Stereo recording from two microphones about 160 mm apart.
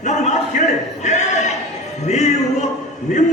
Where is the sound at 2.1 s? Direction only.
45° left (ahead or behind).